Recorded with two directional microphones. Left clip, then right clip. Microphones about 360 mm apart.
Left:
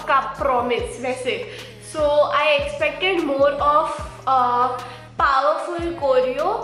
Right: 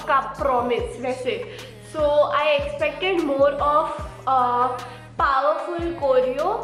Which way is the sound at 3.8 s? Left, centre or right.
Centre.